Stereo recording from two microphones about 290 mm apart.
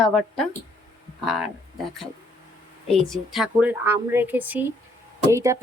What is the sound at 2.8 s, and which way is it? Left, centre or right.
A woman's voice, centre.